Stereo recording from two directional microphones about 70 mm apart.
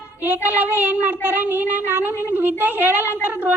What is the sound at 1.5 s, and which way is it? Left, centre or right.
Speech, right.